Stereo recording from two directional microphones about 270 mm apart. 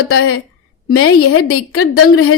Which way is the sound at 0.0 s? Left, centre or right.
Left.